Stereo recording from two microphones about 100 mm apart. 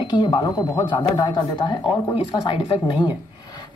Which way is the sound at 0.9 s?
50° left (ahead or behind).